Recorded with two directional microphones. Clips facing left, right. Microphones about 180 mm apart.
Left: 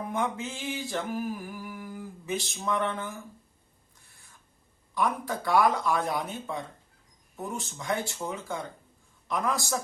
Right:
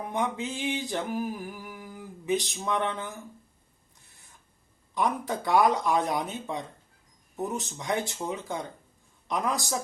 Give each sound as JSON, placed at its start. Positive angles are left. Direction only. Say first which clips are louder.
{"t": 0.1, "sound": "mantra", "louder": "right 2 dB", "side_deg": -15}
{"t": 4.9, "sound": "speech", "louder": "right 1 dB", "side_deg": -20}